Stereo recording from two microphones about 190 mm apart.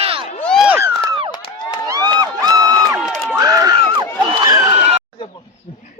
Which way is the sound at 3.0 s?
Centre (ahead or behind).